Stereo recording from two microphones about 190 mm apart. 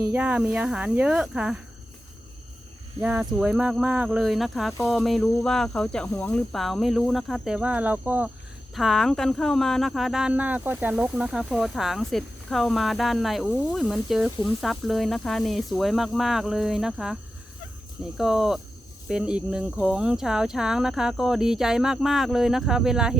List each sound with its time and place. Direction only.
0.1 s speech: 10° right (ahead or behind)
3.0 s speech: 5° right (ahead or behind)
18.2 s speech: centre (ahead or behind)